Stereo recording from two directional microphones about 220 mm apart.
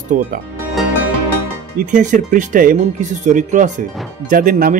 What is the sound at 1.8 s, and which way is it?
Speech, 35° right (ahead or behind).